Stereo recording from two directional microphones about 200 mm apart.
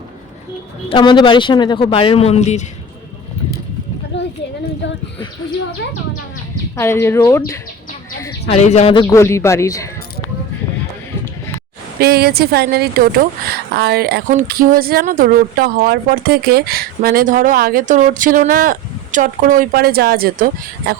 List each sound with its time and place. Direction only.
0.9 s speech: 25° left (ahead or behind)
4.1 s a sound: 65° left (ahead or behind)
6.7 s speech: 10° left (ahead or behind)
8.4 s speech: 30° left (ahead or behind)
9.0 s speech: 15° left (ahead or behind)
11.9 s speech: 50° right (ahead or behind)